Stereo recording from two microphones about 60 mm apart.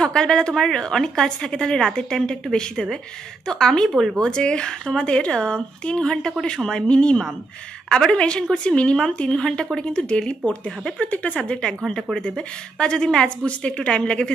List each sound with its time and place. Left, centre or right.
0.0 s a woman's voice: centre